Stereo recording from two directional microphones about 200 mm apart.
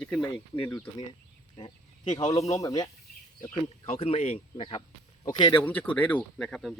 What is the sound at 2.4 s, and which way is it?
Speech, 15° left (ahead or behind).